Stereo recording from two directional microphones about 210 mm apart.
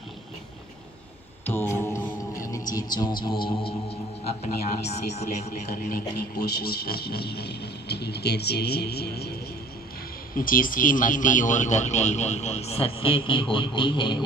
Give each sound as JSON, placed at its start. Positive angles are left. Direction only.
{"t": 1.4, "sound": "music", "side_deg": 10}
{"t": 3.4, "sound": "speech", "side_deg": 25}
{"t": 5.9, "sound": "speech", "side_deg": 45}
{"t": 10.3, "sound": "speech", "side_deg": 40}